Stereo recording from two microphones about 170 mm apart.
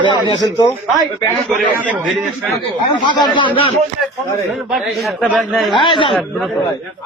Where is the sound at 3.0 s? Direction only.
25° left (ahead or behind).